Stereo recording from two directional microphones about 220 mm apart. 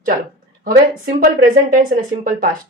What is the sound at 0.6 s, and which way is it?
Speech, 40° right (ahead or behind).